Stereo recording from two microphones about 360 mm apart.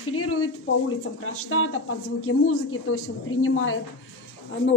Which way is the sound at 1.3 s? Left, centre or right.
Left.